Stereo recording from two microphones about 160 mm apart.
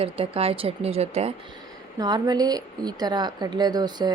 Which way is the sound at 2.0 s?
25° right (ahead or behind).